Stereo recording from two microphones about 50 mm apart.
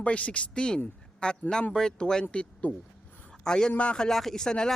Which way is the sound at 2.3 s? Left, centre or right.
Left.